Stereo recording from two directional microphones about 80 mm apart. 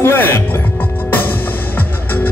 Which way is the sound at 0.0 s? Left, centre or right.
Left.